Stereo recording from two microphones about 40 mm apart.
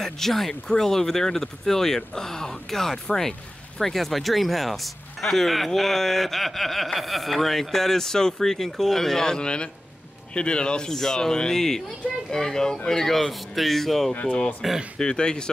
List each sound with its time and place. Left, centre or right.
0.0 s speech: centre
14.1 s speech: left
14.6 s speech: centre
15.0 s speech: left